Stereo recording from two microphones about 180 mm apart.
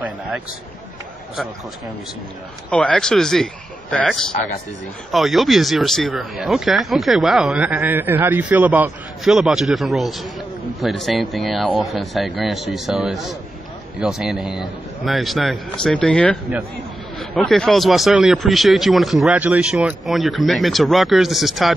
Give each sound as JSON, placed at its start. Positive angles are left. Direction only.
{"t": 2.7, "sound": "speech", "side_deg": 5}